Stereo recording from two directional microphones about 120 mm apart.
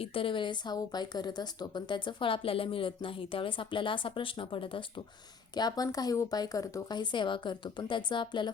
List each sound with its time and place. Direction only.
0.0 s speech: 50° left (ahead or behind)
5.5 s speech: 35° left (ahead or behind)